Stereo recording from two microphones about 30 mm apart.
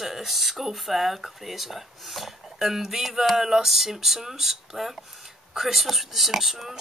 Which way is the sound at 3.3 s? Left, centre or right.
Centre.